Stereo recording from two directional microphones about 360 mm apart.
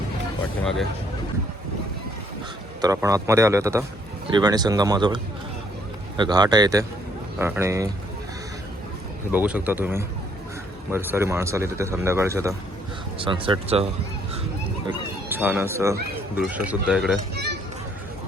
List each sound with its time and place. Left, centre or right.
2.8 s speech: centre
9.3 s speech: centre
15.3 s speech: centre
17.3 s a sound: right